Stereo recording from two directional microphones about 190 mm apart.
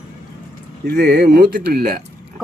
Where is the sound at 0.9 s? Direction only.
55° right (ahead or behind).